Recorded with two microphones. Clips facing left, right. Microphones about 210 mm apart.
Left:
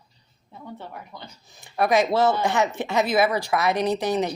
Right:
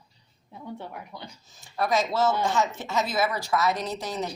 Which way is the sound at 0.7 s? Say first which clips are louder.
Even; 10° right (ahead or behind).